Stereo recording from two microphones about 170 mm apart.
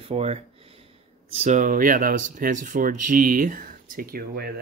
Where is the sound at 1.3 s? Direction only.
45° right (ahead or behind); by 4.5 s 60° right (ahead or behind).